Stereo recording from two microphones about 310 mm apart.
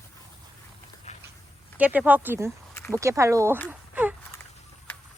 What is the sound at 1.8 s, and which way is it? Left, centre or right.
Speech, centre.